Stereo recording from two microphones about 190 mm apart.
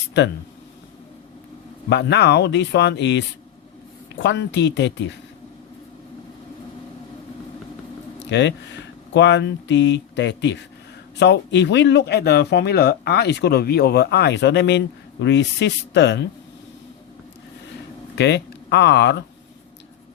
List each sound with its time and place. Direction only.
1.9 s speech: 65° left (ahead or behind)
8.2 s speech: 70° left (ahead or behind)
18.2 s speech: 65° left (ahead or behind)